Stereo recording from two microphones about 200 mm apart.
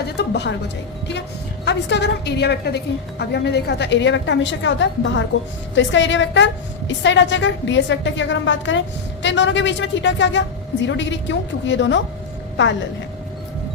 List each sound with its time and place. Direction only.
0.2 s a woman's voice: 60° left (ahead or behind)
1.6 s a woman's voice: 60° left (ahead or behind)